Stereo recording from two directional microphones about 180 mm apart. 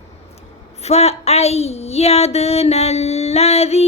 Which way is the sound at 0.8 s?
35° left (ahead or behind).